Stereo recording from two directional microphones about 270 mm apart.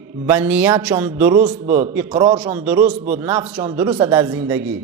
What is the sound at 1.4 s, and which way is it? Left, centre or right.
Speech, right.